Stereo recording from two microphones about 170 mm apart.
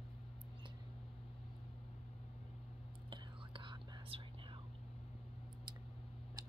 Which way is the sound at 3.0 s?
30° right (ahead or behind).